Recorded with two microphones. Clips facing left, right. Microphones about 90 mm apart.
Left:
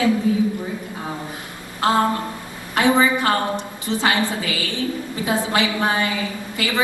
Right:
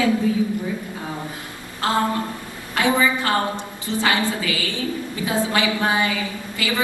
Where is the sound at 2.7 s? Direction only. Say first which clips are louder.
Left 2 dB; 20° left (ahead or behind).